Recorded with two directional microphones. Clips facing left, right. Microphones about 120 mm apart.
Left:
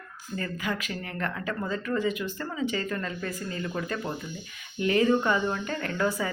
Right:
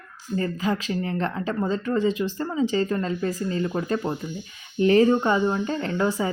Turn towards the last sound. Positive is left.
turn(degrees=-25)  # may be behind; listen again after turning